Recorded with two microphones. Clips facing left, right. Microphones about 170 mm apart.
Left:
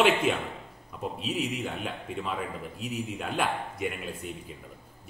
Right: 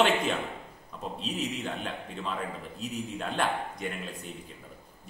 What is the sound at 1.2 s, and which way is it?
A man's voice, 10° left (ahead or behind).